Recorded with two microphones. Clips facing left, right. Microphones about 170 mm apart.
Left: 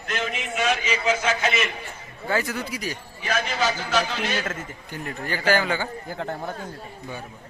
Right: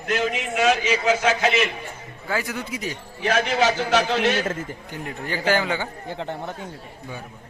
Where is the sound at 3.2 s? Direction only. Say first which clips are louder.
Right 5 dB; 70° right (ahead or behind).